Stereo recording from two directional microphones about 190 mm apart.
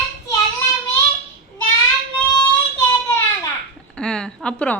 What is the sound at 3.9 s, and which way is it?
Speech, 5° left (ahead or behind).